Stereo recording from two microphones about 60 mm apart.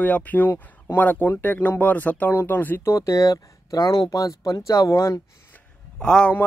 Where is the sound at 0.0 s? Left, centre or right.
Left.